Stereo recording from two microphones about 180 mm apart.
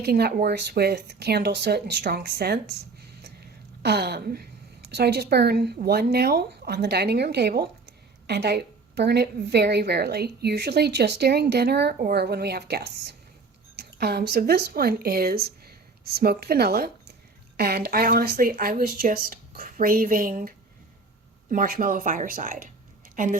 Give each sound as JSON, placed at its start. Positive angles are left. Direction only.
{"t": 0.0, "sound": "a woman's voice", "side_deg": -60}
{"t": 3.8, "sound": "a woman's voice", "side_deg": -65}
{"t": 21.5, "sound": "speech", "side_deg": -50}